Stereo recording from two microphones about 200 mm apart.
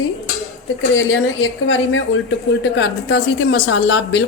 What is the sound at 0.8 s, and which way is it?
A woman's voice, 65° left (ahead or behind).